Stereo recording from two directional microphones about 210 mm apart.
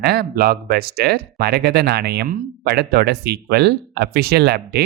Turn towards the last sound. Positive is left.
turn(degrees=-50)  # may be behind; listen again after turning